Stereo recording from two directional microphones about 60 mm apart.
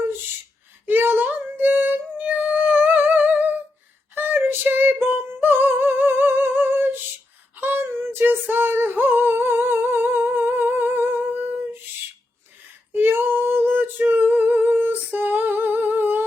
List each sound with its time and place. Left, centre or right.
0.9 s a sound: right
4.1 s female singing: right
12.9 s female singing: right
14.1 s music: right